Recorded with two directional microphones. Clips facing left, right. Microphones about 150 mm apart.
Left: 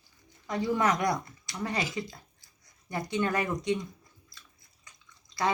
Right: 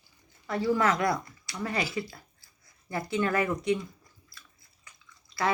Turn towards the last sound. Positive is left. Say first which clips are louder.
# even
turn(degrees=20)  # may be behind; listen again after turning